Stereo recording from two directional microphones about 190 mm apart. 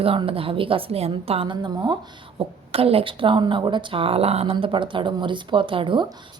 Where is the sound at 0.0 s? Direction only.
30° right (ahead or behind).